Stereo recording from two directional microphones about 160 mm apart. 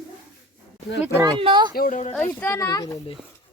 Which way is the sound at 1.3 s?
30° right (ahead or behind).